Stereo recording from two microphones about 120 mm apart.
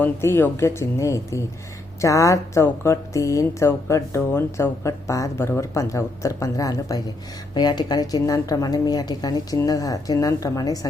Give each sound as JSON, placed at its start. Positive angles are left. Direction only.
{"t": 0.0, "sound": "a woman's voice", "side_deg": 20}